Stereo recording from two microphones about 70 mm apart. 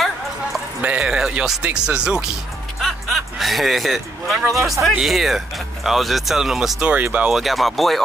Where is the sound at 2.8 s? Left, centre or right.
Centre.